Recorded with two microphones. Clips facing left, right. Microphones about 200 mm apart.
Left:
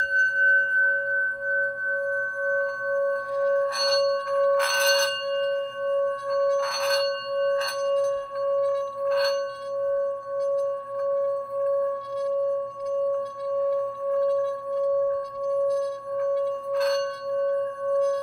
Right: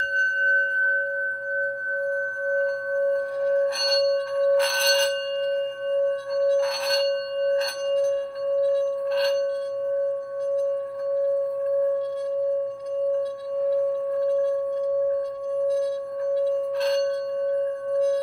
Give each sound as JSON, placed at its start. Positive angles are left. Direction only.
{"t": 3.8, "sound": "singing bowl", "side_deg": -30}
{"t": 6.4, "sound": "singing bowl", "side_deg": -30}
{"t": 8.6, "sound": "singing bowl", "side_deg": -25}